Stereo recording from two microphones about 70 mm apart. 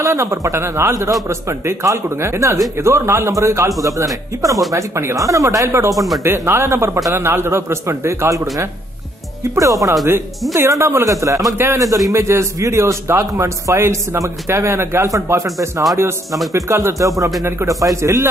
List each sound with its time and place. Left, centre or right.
0.0 s a man's voice: right
7.2 s a man's voice: right
9.6 s a man's voice: right